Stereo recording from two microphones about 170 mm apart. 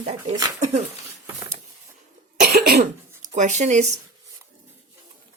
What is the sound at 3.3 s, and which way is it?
Speech, 45° right (ahead or behind).